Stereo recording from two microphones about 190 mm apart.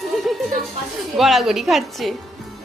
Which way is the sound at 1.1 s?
Centre (ahead or behind).